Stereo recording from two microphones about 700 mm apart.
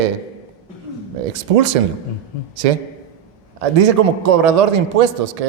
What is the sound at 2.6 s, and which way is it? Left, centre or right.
Speech, right.